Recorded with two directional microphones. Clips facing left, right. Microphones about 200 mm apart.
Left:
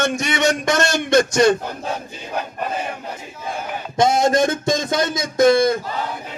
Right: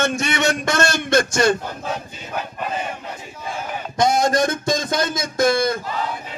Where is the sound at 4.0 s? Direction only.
25° left (ahead or behind).